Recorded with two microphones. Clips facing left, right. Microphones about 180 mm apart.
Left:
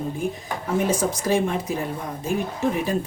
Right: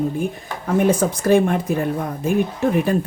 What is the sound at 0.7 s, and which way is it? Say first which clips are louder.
Speech: right 5 dB; 60° right (ahead or behind).